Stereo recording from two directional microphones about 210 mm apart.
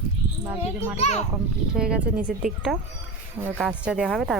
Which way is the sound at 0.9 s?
30° left (ahead or behind).